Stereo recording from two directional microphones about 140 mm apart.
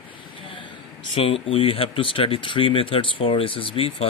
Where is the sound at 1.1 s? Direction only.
40° left (ahead or behind).